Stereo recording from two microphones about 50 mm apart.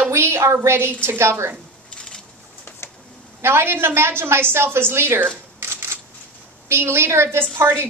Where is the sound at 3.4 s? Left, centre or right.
Right.